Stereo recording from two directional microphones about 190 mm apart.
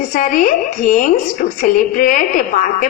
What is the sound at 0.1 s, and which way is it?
A woman's voice, 45° left (ahead or behind).